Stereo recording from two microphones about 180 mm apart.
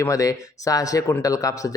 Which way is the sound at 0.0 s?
20° left (ahead or behind).